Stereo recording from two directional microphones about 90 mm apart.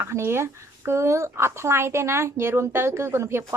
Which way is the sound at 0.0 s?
30° right (ahead or behind).